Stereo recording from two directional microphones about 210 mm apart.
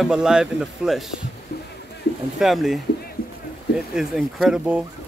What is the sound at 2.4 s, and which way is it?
Speech, centre (ahead or behind).